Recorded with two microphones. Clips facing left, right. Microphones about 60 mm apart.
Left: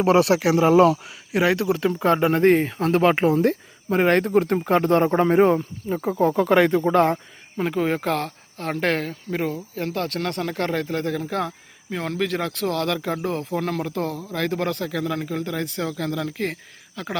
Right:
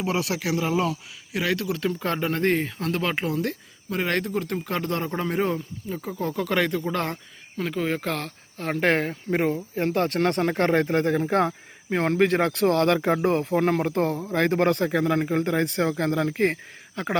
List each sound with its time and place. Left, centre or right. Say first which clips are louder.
0.0 s speech: left 9 dB; left
0.3 s speech: left 8 dB; left
1.3 s speech: left 6 dB; left
4.3 s speech: left 9 dB; left; by 7.8 s centre
7.8 s speech: left 4 dB; centre
8.9 s speech: right 2 dB; right
11.3 s speech: right 4 dB; right
13.5 s speech: right 3 dB; right